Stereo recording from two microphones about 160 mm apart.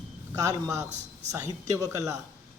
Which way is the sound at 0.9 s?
45° right (ahead or behind).